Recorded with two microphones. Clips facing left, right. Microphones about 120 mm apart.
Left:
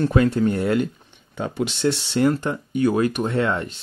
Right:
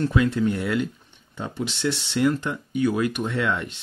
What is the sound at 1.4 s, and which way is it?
Speech, 80° left.